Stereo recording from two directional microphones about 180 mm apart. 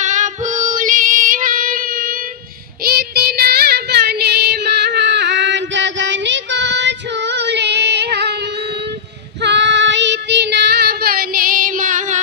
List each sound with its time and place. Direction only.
0.0 s female singing: 40° right (ahead or behind)
2.8 s child singing: 60° right (ahead or behind)
9.4 s child singing: 75° right (ahead or behind); by 12.2 s 45° right (ahead or behind)